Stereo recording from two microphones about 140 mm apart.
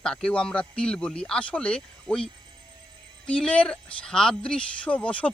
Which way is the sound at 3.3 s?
10° left (ahead or behind).